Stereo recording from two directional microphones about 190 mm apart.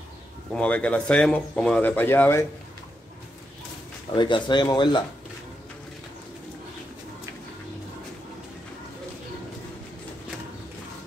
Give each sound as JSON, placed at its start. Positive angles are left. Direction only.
{"t": 0.5, "sound": "speech", "side_deg": 5}
{"t": 4.1, "sound": "speech", "side_deg": 25}